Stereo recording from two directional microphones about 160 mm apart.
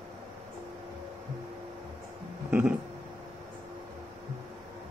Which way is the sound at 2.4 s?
10° right (ahead or behind).